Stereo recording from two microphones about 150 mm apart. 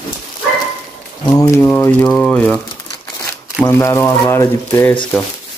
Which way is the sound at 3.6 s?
15° left (ahead or behind).